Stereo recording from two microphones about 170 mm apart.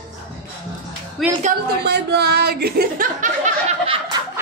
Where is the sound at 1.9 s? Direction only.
75° right (ahead or behind); by 3.5 s 50° right (ahead or behind).